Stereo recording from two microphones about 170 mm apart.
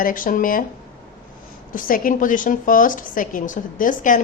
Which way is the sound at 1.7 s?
55° left (ahead or behind).